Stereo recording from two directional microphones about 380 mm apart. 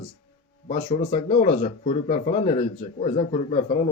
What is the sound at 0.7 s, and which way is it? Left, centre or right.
A man's voice, centre.